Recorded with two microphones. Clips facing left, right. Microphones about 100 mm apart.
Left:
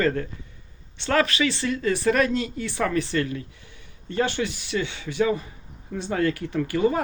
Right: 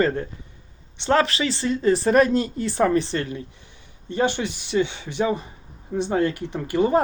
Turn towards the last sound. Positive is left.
turn(degrees=-25)  # may be behind; listen again after turning